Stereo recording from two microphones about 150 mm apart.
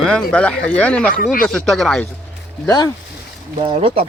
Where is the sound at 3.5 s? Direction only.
40° right (ahead or behind).